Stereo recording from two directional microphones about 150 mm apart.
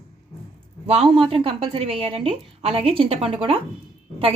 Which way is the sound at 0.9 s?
40° right (ahead or behind).